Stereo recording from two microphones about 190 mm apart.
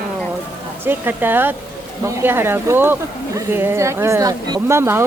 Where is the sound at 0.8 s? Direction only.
10° right (ahead or behind).